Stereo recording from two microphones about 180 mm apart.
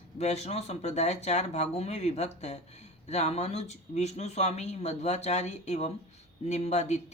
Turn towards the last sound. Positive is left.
turn(degrees=40)  # may be behind; listen again after turning